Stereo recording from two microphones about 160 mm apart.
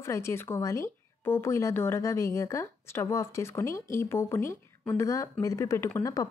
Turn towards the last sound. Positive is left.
turn(degrees=20)  # may be behind; listen again after turning